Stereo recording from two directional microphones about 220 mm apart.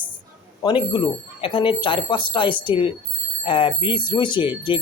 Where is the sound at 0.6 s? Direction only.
20° left (ahead or behind).